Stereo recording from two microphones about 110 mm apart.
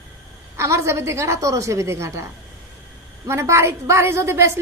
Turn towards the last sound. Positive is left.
turn(degrees=-25)  # may be behind; listen again after turning